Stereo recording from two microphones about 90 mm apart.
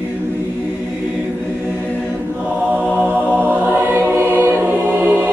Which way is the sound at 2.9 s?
20° right (ahead or behind).